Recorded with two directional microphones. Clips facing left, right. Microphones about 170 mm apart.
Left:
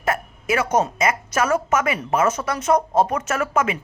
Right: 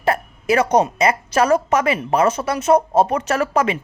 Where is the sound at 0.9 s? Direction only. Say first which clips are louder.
Right 4 dB; 35° right (ahead or behind).